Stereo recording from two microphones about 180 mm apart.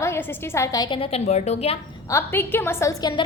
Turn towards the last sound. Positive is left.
turn(degrees=20)  # may be behind; listen again after turning